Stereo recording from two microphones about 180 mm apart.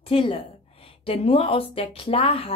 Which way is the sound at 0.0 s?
30° left (ahead or behind).